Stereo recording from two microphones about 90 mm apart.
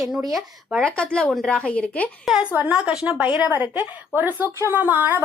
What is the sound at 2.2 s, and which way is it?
A woman's voice, 10° right (ahead or behind).